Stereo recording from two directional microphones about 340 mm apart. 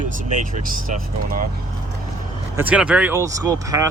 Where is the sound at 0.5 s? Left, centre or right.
Right.